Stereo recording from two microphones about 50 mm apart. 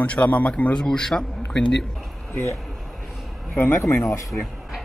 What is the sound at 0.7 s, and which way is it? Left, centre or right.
A man's voice, centre.